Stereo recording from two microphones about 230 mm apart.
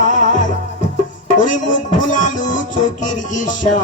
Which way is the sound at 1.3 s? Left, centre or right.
Left.